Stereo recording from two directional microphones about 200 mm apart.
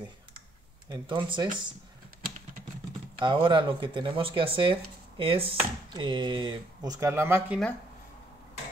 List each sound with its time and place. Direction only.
0.8 s speech: 20° right (ahead or behind)
3.2 s speech: 25° right (ahead or behind)